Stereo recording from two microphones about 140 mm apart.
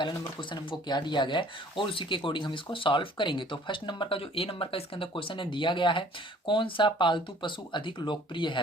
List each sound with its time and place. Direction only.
0.0 s speech: 30° left (ahead or behind)